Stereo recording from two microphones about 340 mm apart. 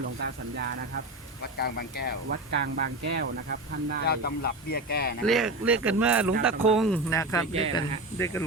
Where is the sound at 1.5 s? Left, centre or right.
Left.